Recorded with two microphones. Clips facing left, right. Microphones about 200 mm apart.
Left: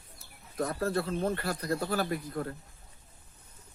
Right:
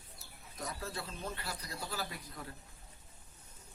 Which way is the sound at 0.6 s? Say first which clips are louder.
Left 12 dB; 55° left (ahead or behind).